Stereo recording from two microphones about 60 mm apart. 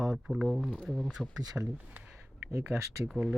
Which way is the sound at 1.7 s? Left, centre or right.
Right.